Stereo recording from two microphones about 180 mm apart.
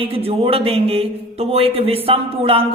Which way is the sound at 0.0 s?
30° right (ahead or behind).